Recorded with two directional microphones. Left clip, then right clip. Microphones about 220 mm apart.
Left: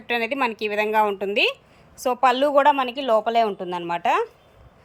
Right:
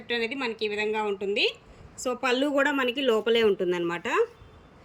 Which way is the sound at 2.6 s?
5° left (ahead or behind).